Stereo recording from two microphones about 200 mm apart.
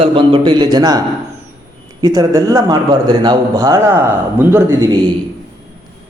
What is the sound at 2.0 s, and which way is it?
A man's voice, 20° right (ahead or behind).